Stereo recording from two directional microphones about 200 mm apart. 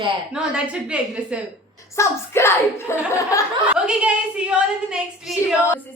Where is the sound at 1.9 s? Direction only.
15° left (ahead or behind).